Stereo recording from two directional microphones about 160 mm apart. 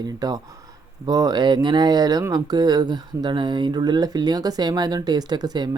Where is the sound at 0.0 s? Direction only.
25° right (ahead or behind).